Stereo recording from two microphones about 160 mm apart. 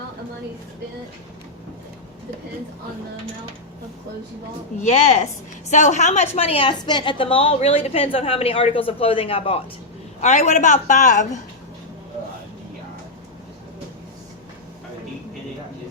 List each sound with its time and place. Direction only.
4.8 s a man's voice: 45° left (ahead or behind)